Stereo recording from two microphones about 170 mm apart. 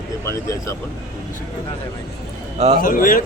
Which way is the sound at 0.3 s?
15° left (ahead or behind).